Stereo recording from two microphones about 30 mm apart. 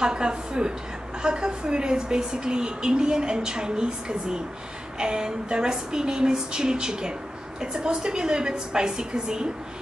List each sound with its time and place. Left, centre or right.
0.0 s speech: right